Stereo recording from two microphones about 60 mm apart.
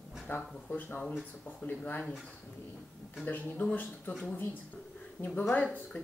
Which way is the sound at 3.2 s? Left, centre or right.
Left.